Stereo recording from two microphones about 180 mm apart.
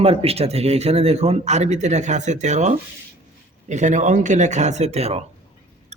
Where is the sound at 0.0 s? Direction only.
35° right (ahead or behind).